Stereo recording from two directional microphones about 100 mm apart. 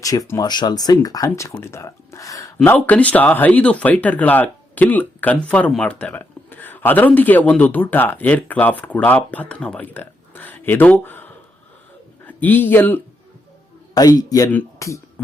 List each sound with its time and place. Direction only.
0.0 s speech: 35° left (ahead or behind)
2.6 s speech: 15° left (ahead or behind)
13.9 s speech: 40° left (ahead or behind)